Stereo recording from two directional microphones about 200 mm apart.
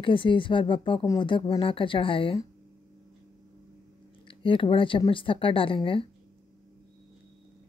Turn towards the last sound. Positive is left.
turn(degrees=25)  # may be behind; listen again after turning